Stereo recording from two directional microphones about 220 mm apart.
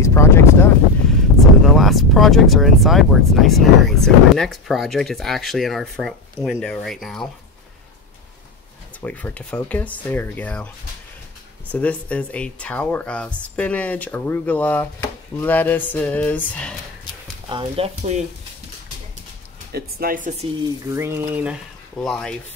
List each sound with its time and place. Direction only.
0.0 s a sound: 10° left (ahead or behind)
1.6 s speech: centre (ahead or behind)
9.0 s speech: 5° left (ahead or behind)
11.7 s speech: 5° left (ahead or behind)
17.5 s speech: 25° right (ahead or behind)
19.7 s speech: 40° right (ahead or behind)
20.9 s speech: 10° right (ahead or behind)